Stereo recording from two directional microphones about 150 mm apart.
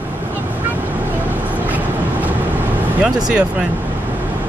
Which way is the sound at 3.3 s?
5° right (ahead or behind).